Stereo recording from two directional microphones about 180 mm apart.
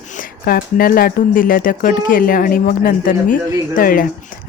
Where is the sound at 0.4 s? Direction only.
55° left (ahead or behind).